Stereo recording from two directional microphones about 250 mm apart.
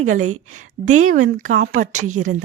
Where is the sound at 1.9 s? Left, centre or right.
Right.